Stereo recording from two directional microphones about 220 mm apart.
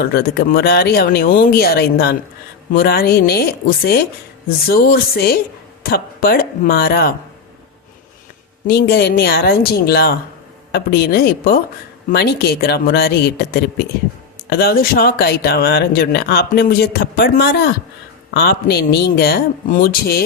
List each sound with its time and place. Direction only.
0.0 s speech: 45° left (ahead or behind)
8.6 s speech: 45° left (ahead or behind)